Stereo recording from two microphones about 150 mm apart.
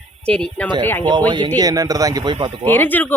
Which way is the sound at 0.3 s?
5° left (ahead or behind).